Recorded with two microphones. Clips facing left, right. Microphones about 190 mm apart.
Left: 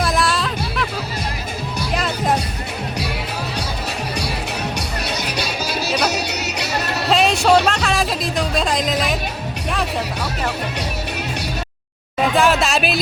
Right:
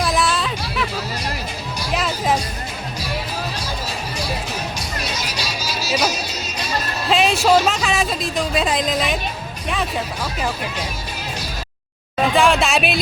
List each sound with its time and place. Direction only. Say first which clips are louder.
0.0 s music: even; centre (ahead or behind)
5.0 s music: left 3 dB; 60° left (ahead or behind)
7.1 s music: left 1 dB; centre (ahead or behind)
12.3 s music: even; centre (ahead or behind)